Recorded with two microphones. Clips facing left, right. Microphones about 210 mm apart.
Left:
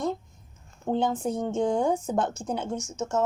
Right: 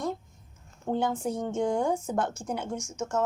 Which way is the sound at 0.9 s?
20° left (ahead or behind).